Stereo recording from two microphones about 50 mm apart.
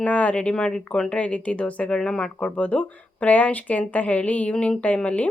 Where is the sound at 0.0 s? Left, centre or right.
Left.